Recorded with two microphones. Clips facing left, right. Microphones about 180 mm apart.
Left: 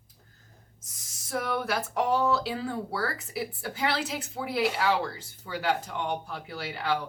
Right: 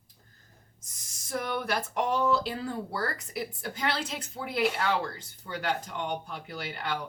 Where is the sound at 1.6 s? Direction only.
Centre (ahead or behind).